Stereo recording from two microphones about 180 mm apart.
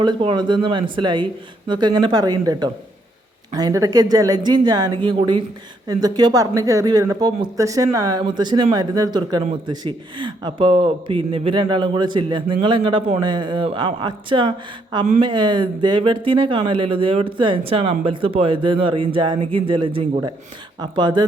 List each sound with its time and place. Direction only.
0.0 s speech: 25° right (ahead or behind)